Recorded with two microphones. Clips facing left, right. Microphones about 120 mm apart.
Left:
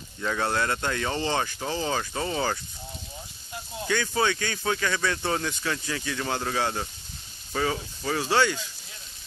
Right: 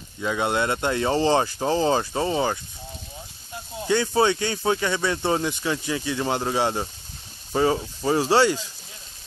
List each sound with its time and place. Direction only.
0.2 s speech: 15° right (ahead or behind)
3.8 s speech: 30° right (ahead or behind)